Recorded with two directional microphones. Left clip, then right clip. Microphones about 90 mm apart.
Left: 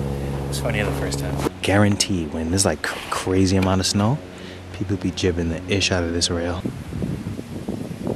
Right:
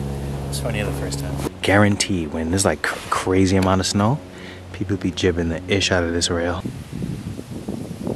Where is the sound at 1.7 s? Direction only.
15° right (ahead or behind).